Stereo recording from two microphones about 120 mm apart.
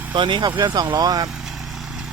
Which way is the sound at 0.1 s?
40° right (ahead or behind).